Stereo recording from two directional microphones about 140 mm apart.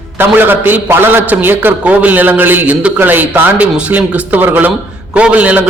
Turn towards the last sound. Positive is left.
turn(degrees=-10)  # may be behind; listen again after turning